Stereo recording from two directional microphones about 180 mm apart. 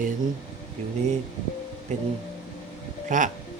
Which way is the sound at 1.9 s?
45° right (ahead or behind).